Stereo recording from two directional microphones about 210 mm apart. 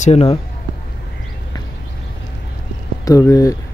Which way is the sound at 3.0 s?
15° left (ahead or behind).